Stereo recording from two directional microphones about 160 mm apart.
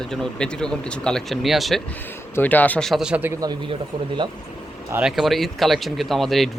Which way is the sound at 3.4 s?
25° right (ahead or behind).